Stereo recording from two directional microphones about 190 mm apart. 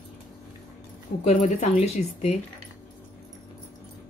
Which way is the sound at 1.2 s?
35° left (ahead or behind).